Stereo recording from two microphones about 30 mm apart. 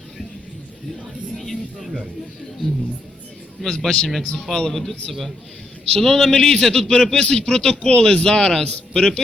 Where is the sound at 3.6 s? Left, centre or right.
Centre.